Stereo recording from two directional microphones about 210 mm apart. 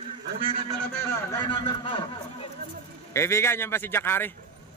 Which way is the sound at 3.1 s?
15° left (ahead or behind).